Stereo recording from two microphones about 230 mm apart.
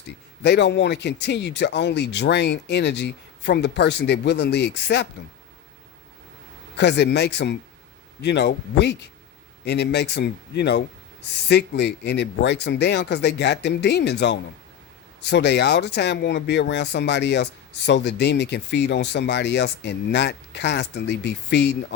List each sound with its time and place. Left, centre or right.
0.4 s speech: left
6.7 s speech: left